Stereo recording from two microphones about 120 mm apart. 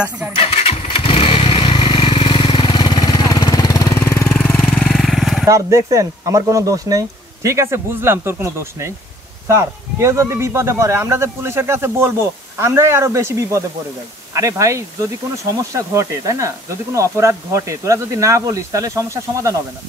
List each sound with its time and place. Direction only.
0.4 s motorcycle: 55° left (ahead or behind); by 4.0 s 30° left (ahead or behind)
4.0 s jackhammer: 20° left (ahead or behind)
4.5 s vehicle: 5° left (ahead or behind)
5.5 s speech: 25° right (ahead or behind)